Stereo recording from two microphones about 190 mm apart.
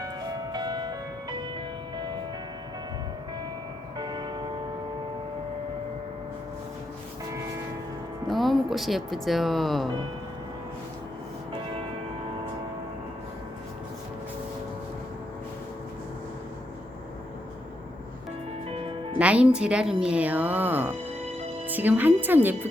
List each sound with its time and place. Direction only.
0.0 s music: 20° right (ahead or behind)
3.9 s music: 20° right (ahead or behind)
8.3 s speech: centre (ahead or behind)
19.2 s speech: 5° right (ahead or behind)